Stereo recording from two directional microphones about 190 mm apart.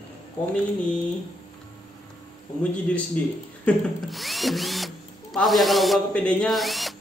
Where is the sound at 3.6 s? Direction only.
Centre (ahead or behind).